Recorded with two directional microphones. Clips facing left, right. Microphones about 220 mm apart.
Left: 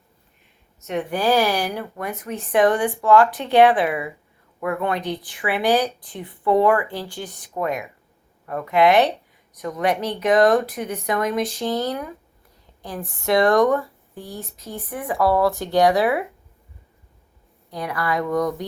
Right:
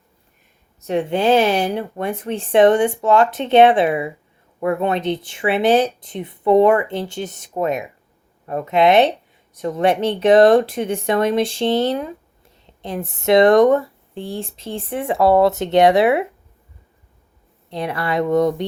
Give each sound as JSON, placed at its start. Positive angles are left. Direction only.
{"t": 0.8, "sound": "speech", "side_deg": -30}
{"t": 17.7, "sound": "speech", "side_deg": -25}